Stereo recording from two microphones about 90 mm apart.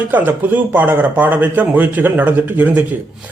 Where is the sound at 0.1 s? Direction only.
20° right (ahead or behind).